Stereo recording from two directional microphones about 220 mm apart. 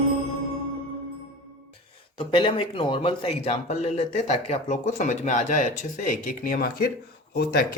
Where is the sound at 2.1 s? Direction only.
25° left (ahead or behind); by 6.8 s 40° left (ahead or behind).